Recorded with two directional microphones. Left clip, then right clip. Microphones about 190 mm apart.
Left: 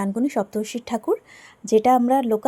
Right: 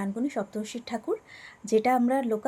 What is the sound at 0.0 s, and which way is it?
Speech, 40° left (ahead or behind).